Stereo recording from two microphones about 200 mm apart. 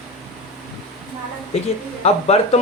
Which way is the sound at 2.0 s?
30° left (ahead or behind).